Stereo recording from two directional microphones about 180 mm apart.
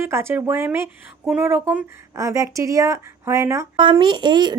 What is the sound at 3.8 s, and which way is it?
Speech, 25° right (ahead or behind).